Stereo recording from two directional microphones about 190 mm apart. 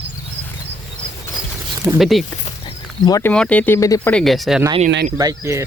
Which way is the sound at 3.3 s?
5° left (ahead or behind).